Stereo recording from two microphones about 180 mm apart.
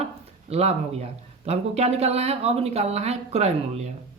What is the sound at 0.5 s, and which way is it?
Speech, 35° right (ahead or behind).